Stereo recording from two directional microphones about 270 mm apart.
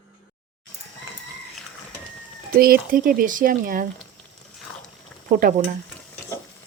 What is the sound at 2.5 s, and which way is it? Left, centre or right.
Speech, right.